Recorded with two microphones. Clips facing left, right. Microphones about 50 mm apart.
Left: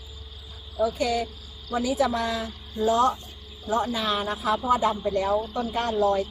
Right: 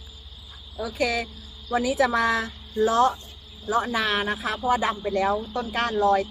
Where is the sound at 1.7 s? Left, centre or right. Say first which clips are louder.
Right 2 dB; right.